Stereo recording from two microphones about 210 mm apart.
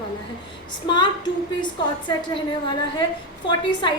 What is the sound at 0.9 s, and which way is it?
A woman's voice, 20° left (ahead or behind).